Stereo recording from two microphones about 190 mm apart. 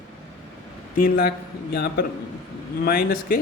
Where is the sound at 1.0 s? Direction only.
50° left (ahead or behind).